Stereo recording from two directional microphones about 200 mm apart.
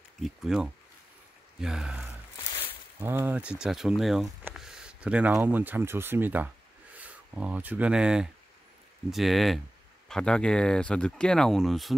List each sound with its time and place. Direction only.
0.2 s speech: centre (ahead or behind)